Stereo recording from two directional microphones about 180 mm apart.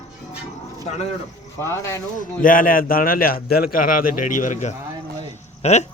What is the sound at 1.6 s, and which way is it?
Speech, 15° left (ahead or behind).